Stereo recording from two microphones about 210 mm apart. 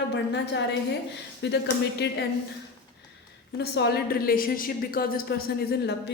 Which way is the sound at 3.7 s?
50° left (ahead or behind).